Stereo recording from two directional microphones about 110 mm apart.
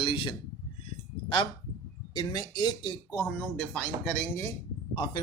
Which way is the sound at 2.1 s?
40° left (ahead or behind).